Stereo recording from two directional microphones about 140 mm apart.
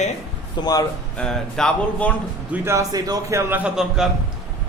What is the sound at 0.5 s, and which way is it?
Speech, 30° left (ahead or behind).